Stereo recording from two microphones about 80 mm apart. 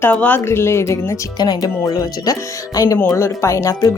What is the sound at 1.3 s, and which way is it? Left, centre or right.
Speech, left.